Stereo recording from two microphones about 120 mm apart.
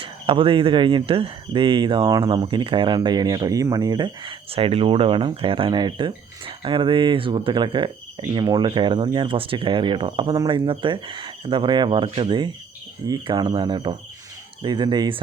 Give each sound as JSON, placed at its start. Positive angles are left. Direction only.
{"t": 0.0, "sound": "speech", "side_deg": -50}